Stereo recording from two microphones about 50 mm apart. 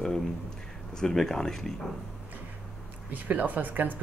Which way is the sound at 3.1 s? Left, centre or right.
Right.